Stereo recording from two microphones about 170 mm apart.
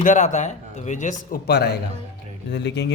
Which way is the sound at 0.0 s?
50° left (ahead or behind).